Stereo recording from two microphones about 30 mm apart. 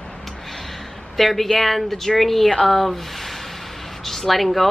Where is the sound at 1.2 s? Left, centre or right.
Centre.